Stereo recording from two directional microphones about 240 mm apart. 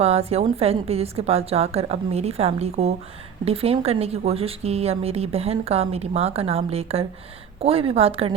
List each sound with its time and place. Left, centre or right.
0.0 s a woman's voice: right